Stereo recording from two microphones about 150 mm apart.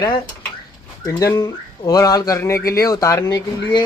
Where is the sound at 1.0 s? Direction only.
20° left (ahead or behind).